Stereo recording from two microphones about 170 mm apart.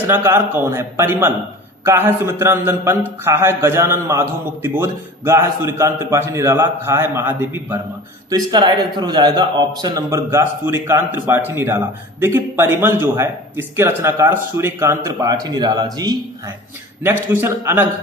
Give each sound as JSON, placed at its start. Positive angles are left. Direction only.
{"t": 0.1, "sound": "a man's voice", "side_deg": -10}
{"t": 8.3, "sound": "a man's voice", "side_deg": -25}
{"t": 17.0, "sound": "a man's voice", "side_deg": -15}